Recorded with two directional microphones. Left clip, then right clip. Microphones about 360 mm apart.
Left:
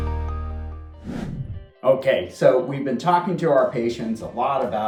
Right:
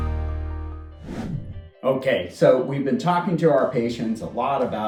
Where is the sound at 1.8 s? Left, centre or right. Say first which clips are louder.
Left 3 dB; centre.